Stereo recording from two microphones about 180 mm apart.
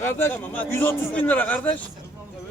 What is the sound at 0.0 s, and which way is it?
A man's voice, 10° left (ahead or behind).